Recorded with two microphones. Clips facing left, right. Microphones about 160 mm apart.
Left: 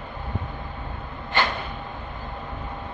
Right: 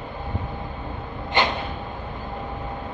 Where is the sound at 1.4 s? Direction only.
20° right (ahead or behind).